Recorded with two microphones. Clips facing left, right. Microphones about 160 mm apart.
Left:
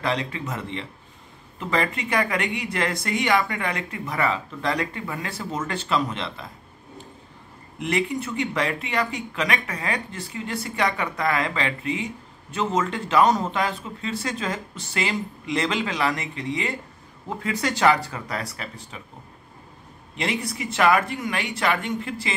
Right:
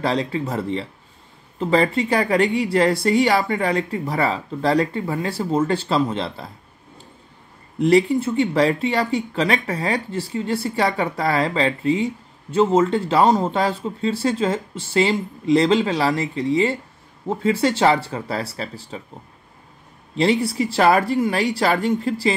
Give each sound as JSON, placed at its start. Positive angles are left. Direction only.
{"t": 0.0, "sound": "speech", "side_deg": -35}
{"t": 7.8, "sound": "speech", "side_deg": -30}
{"t": 20.2, "sound": "speech", "side_deg": -30}